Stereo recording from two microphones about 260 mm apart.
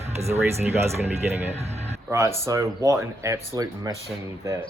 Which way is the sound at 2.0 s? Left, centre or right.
Centre.